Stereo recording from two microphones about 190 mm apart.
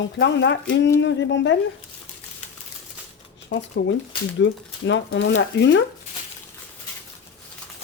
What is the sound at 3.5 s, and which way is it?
Speech, 70° left (ahead or behind).